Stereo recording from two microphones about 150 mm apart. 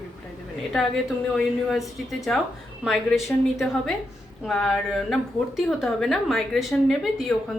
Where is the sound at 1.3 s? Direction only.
Centre (ahead or behind).